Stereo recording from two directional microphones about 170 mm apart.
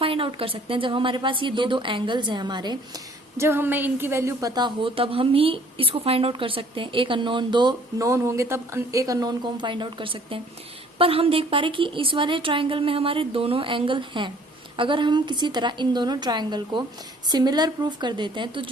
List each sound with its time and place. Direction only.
0.0 s a woman's voice: 30° right (ahead or behind)
3.3 s a woman's voice: 15° right (ahead or behind)